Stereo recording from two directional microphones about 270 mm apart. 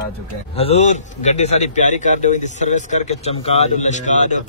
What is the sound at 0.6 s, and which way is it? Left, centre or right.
A man's voice, left.